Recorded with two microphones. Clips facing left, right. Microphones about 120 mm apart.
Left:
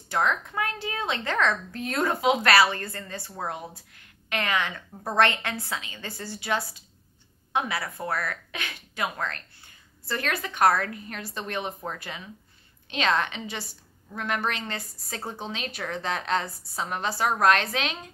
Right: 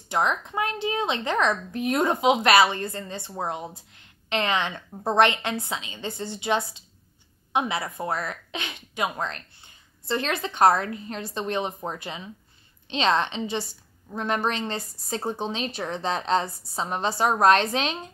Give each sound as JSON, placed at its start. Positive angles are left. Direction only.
{"t": 0.1, "sound": "a woman's voice", "side_deg": -20}